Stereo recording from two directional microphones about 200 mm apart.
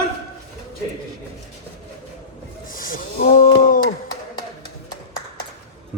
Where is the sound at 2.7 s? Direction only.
45° left (ahead or behind).